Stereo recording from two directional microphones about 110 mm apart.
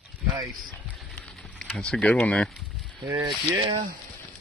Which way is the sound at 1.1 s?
10° left (ahead or behind).